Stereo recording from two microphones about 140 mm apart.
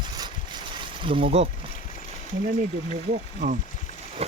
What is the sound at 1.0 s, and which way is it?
Speech, 40° right (ahead or behind).